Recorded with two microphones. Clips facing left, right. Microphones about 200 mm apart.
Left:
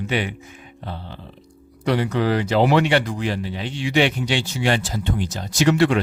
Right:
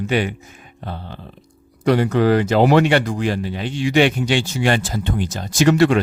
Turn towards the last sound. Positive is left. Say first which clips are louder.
# right 3 dB
turn(degrees=-45)  # may be behind; listen again after turning